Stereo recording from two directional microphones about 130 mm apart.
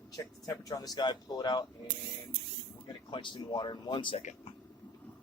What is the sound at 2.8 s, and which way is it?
Speech, 40° left (ahead or behind).